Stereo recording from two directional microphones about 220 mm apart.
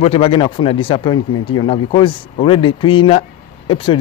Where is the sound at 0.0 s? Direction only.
25° left (ahead or behind).